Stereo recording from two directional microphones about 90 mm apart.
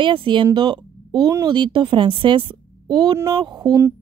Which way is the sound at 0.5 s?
55° right (ahead or behind).